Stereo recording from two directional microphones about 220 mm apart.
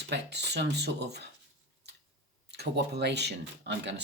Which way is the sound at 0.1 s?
50° right (ahead or behind).